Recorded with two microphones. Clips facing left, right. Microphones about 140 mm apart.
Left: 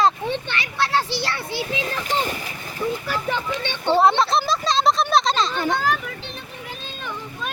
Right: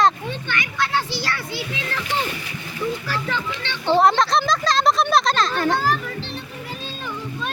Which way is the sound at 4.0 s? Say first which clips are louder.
Even; 5° left (ahead or behind).